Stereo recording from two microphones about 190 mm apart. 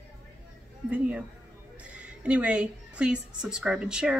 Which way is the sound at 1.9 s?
5° right (ahead or behind).